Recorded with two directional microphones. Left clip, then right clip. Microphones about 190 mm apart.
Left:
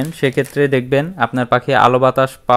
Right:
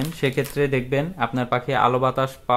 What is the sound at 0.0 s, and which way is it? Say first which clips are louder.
Speech: left 6 dB; 30° left (ahead or behind).